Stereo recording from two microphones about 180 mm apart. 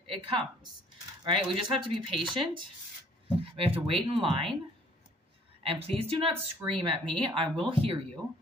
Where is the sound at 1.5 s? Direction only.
30° right (ahead or behind).